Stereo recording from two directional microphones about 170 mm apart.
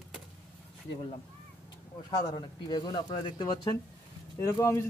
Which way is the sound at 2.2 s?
25° left (ahead or behind).